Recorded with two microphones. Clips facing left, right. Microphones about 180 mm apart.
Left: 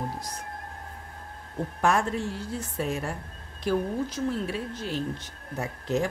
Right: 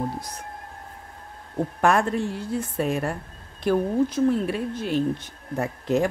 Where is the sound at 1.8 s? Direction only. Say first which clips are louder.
Right 4 dB; 60° right (ahead or behind).